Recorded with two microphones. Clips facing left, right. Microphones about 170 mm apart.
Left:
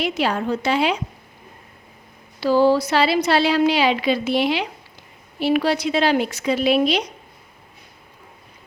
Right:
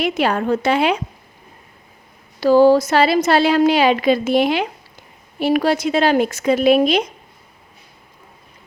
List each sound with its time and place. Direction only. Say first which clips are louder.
0.0 s a woman's voice: right 3 dB; 55° right (ahead or behind)
2.4 s a woman's voice: right 5 dB; 45° right (ahead or behind)